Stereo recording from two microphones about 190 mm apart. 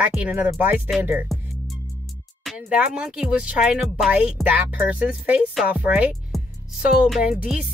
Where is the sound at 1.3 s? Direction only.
Centre (ahead or behind).